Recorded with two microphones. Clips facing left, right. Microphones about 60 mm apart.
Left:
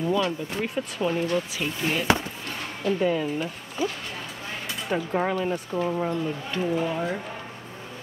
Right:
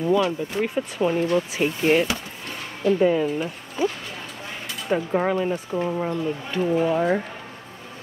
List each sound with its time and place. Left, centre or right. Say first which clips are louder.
0.1 s speech: right 4 dB; centre
1.5 s speech: right 7 dB; right
2.8 s speech: right 5 dB; centre
4.9 s speech: right 4 dB; centre
6.9 s speech: right 7 dB; right